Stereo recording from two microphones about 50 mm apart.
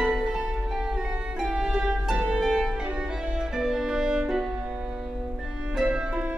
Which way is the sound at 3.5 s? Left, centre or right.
Centre.